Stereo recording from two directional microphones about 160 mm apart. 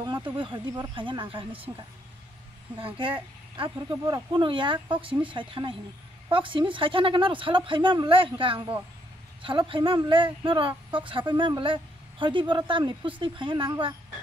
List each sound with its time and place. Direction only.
0.0 s speech: 30° right (ahead or behind)
2.8 s speech: 35° right (ahead or behind)